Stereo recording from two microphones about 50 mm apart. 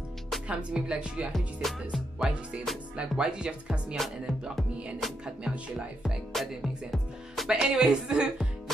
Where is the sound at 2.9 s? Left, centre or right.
Centre.